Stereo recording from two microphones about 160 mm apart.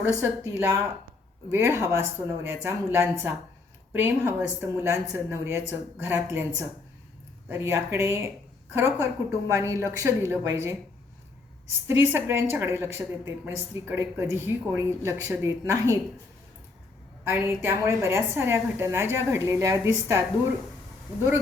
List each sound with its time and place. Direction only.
0.2 s a woman's voice: 15° right (ahead or behind)
11.9 s a woman's voice: 15° right (ahead or behind)
17.2 s a woman's voice: 15° right (ahead or behind)